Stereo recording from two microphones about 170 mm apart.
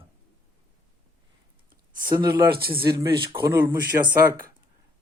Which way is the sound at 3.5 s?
10° right (ahead or behind).